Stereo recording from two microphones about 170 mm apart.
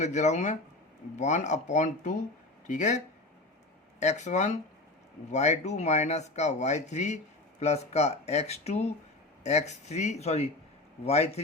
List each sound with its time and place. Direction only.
0.0 s speech: 45° left (ahead or behind)
4.0 s speech: 40° left (ahead or behind)